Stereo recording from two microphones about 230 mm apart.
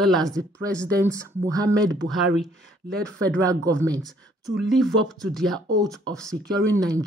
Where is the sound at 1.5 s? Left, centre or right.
Centre.